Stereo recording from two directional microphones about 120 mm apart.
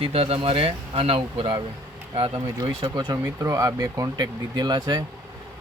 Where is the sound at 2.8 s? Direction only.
40° right (ahead or behind).